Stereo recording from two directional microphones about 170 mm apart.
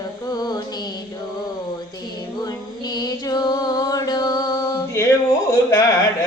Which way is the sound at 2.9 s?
20° left (ahead or behind).